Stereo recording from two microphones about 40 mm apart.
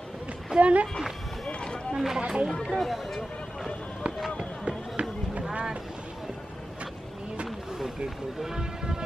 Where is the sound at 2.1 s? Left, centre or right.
Right.